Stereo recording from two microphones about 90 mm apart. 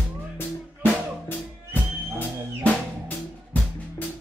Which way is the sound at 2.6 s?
20° left (ahead or behind).